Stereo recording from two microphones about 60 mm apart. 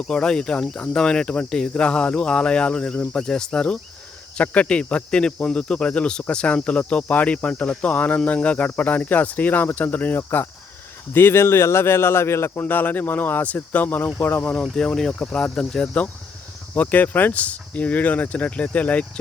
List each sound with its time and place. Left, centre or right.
0.1 s speech: centre; by 10.2 s left
10.2 s speech: left
12.5 s speech: left
14.5 s speech: centre
16.7 s speech: left